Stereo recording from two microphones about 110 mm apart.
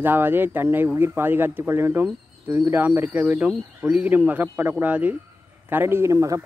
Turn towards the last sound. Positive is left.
turn(degrees=-30)  # may be behind; listen again after turning